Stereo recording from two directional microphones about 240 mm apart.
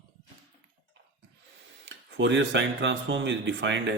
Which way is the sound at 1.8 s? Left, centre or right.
Right.